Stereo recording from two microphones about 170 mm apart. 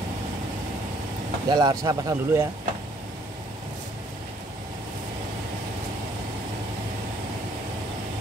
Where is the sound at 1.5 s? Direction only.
20° right (ahead or behind).